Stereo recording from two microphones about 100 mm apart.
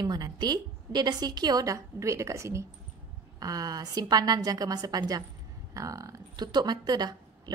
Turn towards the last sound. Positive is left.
turn(degrees=-45)  # may be behind; listen again after turning